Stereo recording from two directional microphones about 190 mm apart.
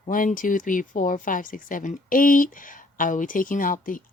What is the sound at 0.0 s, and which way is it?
Speech, 45° left (ahead or behind).